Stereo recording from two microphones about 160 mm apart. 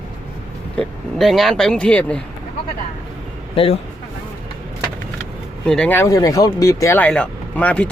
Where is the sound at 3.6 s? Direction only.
35° left (ahead or behind).